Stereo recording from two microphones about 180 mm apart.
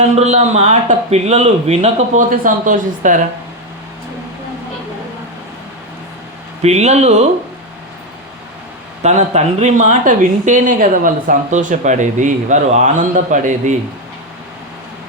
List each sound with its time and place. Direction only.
0.2 s a man's voice: 35° right (ahead or behind)
6.6 s a man's voice: 35° right (ahead or behind)
9.0 s a woman's voice: 40° right (ahead or behind)